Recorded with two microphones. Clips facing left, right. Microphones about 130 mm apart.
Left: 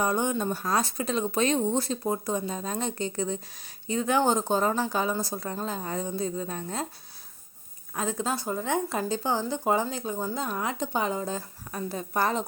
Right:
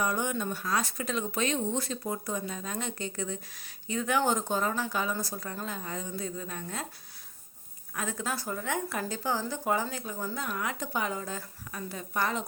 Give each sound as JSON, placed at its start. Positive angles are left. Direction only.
{"t": 0.0, "sound": "speech", "side_deg": 30}
{"t": 7.9, "sound": "speech", "side_deg": 25}